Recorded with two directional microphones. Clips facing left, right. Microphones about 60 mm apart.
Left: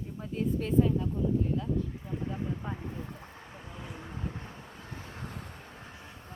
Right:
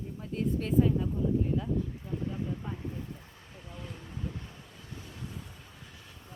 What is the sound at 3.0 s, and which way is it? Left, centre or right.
Vehicle, left.